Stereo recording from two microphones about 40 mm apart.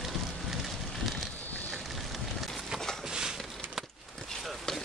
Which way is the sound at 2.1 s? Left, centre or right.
Centre.